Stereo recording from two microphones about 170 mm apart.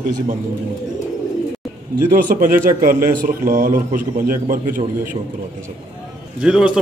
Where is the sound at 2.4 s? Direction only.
55° right (ahead or behind).